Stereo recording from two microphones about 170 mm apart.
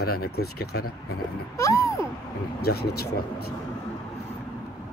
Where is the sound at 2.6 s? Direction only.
65° left (ahead or behind).